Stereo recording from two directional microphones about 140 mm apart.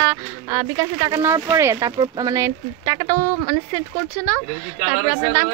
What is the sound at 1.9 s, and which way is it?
Speech, 30° right (ahead or behind).